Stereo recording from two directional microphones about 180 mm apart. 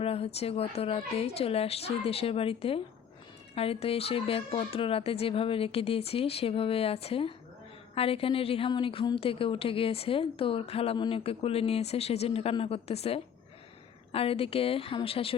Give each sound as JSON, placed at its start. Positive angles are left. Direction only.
{"t": 0.0, "sound": "a woman's voice", "side_deg": 35}